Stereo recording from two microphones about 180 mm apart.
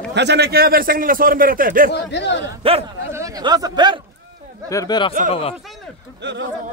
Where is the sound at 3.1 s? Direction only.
15° right (ahead or behind).